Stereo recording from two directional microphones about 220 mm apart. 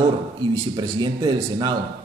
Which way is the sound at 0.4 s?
20° right (ahead or behind).